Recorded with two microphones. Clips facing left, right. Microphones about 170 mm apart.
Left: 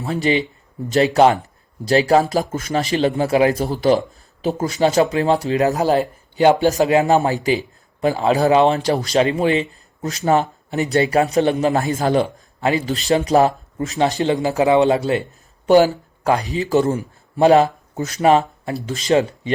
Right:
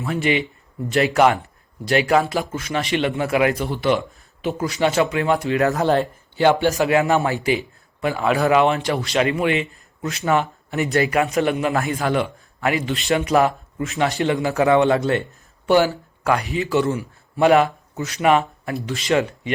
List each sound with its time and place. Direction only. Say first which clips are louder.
0.0 s speech: left 2 dB; 35° left (ahead or behind)
5.5 s speech: left 2 dB; 20° left (ahead or behind)
5.8 s speech: left 1 dB; 5° left (ahead or behind)
6.5 s speech: left 3 dB; 35° left (ahead or behind)
16.2 s speech: left 2 dB; 35° left (ahead or behind)